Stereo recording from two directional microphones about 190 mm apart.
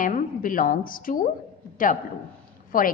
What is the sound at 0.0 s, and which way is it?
A woman's voice, 45° left (ahead or behind).